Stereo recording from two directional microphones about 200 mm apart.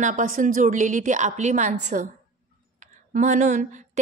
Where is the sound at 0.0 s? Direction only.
40° right (ahead or behind).